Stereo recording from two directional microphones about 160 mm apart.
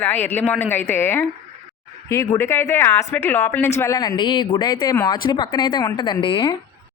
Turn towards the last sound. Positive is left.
turn(degrees=30)  # may be behind; listen again after turning